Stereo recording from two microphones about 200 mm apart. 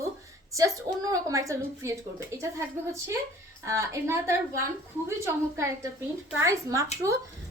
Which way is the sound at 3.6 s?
15° right (ahead or behind).